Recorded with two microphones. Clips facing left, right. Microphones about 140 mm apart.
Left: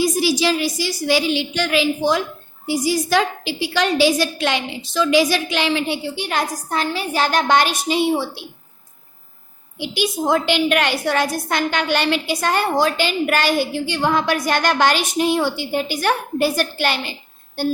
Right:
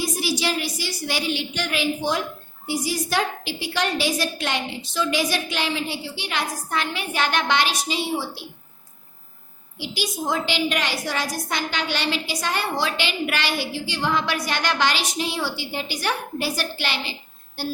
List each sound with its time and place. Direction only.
0.0 s a woman's voice: 90° left
6.1 s a woman's voice: 45° left (ahead or behind)
9.7 s a woman's voice: 60° left (ahead or behind)